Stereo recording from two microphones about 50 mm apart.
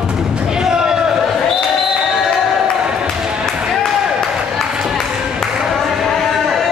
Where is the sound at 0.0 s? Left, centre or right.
Centre.